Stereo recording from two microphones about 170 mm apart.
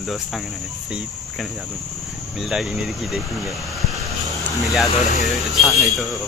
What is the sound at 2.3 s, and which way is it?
Speech, centre (ahead or behind).